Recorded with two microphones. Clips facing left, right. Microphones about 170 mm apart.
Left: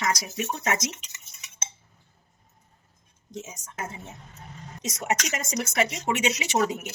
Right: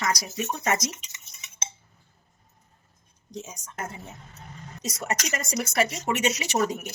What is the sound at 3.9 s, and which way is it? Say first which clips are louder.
A woman's voice: even; 20° left (ahead or behind).